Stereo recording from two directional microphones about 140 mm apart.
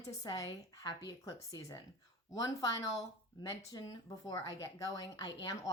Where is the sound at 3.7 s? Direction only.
25° left (ahead or behind).